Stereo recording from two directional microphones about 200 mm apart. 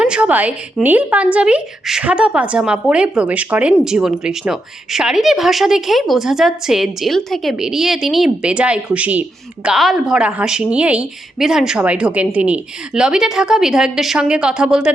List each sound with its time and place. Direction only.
0.0 s speech: 5° right (ahead or behind)